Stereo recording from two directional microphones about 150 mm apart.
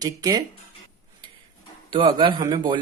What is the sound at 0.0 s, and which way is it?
Speech, 25° right (ahead or behind).